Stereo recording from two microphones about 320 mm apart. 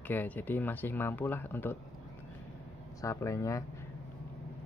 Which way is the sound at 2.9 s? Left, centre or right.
Centre.